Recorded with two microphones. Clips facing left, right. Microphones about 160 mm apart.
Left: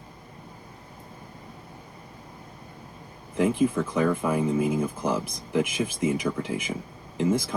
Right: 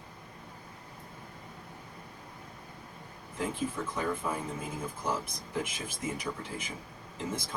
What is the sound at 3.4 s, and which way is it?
Speech, 85° left.